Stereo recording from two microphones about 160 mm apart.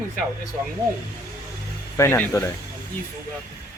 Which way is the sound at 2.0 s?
15° left (ahead or behind).